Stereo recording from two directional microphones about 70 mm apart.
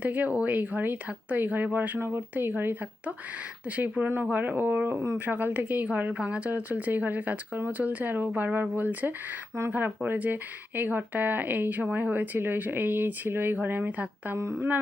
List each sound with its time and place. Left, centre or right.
0.0 s a woman's voice: right
2.0 s speech: right
3.8 s a woman's voice: right